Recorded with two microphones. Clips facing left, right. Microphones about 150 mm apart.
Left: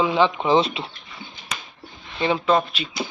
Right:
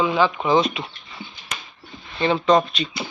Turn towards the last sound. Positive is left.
turn(degrees=5)  # may be behind; listen again after turning